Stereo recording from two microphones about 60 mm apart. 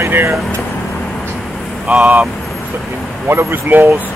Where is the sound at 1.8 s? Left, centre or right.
Right.